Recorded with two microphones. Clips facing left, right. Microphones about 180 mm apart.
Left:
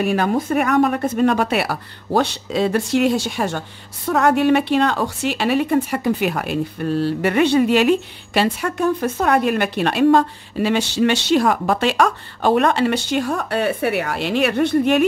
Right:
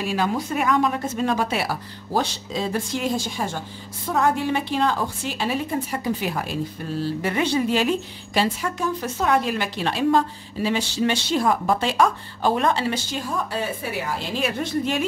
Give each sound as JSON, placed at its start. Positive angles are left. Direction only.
{"t": 0.0, "sound": "a woman's voice", "side_deg": 55}